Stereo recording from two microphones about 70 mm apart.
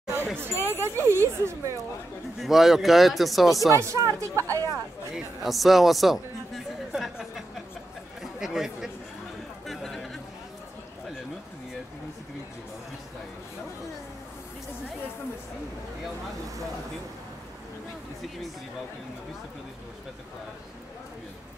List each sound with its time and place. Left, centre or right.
0.7 s speech: right
2.4 s speech: centre
3.7 s speech: right
5.1 s a man's voice: centre
8.2 s chatter: centre
9.7 s a sound: centre